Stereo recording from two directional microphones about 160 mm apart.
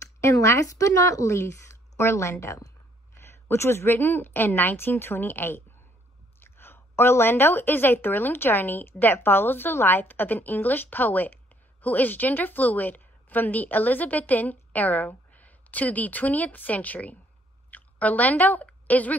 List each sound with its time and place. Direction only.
0.0 s a woman's voice: 20° left (ahead or behind)